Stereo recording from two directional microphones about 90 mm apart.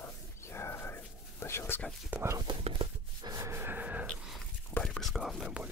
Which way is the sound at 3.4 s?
25° right (ahead or behind).